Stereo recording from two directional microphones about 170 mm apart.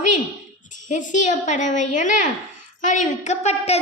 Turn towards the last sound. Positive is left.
turn(degrees=40)  # may be behind; listen again after turning